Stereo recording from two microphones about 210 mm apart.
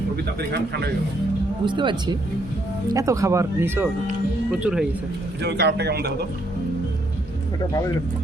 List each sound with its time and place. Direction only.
0.5 s a man's voice: 50° right (ahead or behind)
1.6 s speech: 20° right (ahead or behind); by 4.9 s 5° right (ahead or behind)
5.4 s a man's voice: 50° right (ahead or behind)